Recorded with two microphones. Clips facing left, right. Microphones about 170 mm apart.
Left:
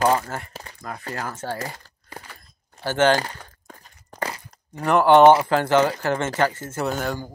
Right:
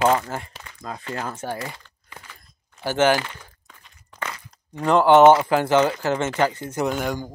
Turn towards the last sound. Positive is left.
turn(degrees=-15)  # may be behind; listen again after turning